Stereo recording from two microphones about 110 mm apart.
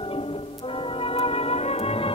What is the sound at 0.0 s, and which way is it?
Music, 60° left (ahead or behind).